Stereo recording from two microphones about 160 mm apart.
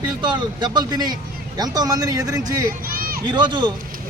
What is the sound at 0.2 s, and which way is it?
A man's voice, 30° right (ahead or behind).